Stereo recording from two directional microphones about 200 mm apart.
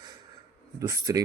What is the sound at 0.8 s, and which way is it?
Speech, 15° right (ahead or behind).